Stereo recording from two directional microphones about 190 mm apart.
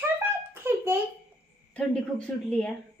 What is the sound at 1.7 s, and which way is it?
A woman's voice, 5° left (ahead or behind).